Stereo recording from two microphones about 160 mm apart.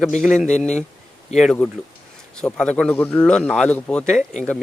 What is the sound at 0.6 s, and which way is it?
Speech, 5° left (ahead or behind).